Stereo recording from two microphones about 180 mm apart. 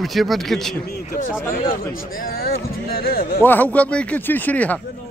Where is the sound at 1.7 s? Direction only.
55° left (ahead or behind).